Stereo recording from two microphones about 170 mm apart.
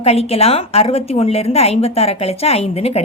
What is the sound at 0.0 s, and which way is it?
A woman's voice, 35° left (ahead or behind).